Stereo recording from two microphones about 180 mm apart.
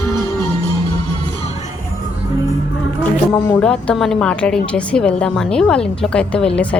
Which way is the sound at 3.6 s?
5° left (ahead or behind).